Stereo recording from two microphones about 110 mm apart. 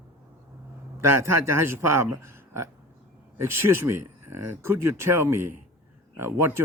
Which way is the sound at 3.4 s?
20° right (ahead or behind).